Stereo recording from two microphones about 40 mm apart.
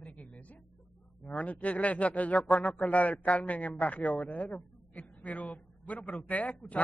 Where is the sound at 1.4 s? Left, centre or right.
Left.